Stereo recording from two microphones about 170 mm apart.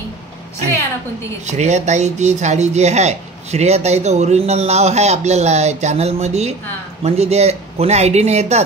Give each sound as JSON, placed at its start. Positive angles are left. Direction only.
{"t": 1.4, "sound": "speech", "side_deg": -40}